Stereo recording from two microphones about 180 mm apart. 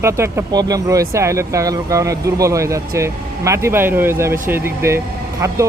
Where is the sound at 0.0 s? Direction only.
15° right (ahead or behind).